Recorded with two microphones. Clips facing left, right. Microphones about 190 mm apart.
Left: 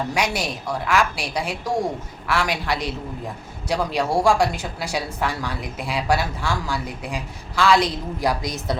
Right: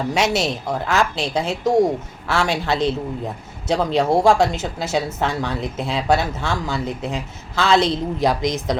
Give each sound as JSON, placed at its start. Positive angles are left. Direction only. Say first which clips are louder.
{"t": 0.1, "sound": "a woman's voice", "louder": "right 5 dB", "side_deg": -25}